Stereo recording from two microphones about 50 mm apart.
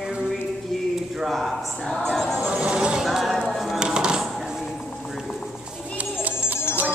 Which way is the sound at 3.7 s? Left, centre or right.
Centre.